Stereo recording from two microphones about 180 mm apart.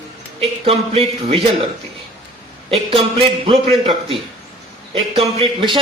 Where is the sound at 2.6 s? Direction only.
30° right (ahead or behind).